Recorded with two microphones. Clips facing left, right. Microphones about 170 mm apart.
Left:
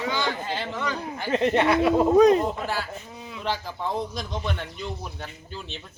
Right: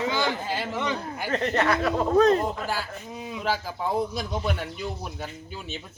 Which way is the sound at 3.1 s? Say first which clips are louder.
Right 4 dB; 20° right (ahead or behind).